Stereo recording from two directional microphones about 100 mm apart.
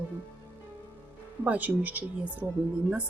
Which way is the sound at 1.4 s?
15° right (ahead or behind).